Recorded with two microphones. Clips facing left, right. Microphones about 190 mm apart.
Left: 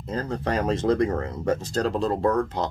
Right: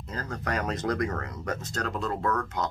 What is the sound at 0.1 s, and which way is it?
Speech, 30° left (ahead or behind).